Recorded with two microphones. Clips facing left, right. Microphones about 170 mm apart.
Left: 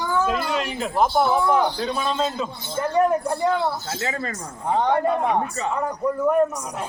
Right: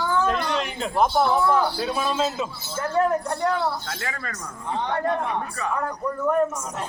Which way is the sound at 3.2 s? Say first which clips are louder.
Left 2 dB; centre (ahead or behind).